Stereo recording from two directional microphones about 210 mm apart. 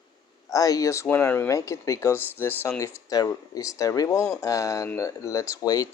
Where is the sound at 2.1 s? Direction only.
10° right (ahead or behind).